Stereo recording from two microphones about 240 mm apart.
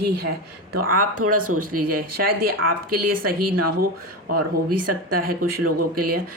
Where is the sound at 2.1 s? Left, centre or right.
Right.